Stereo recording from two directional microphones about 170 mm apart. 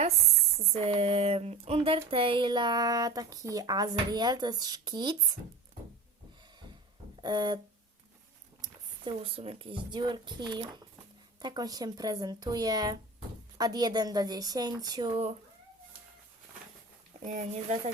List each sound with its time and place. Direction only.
0.6 s speech: 35° right (ahead or behind)
7.2 s speech: 25° right (ahead or behind)
9.1 s speech: 35° right (ahead or behind)
17.2 s speech: 40° right (ahead or behind)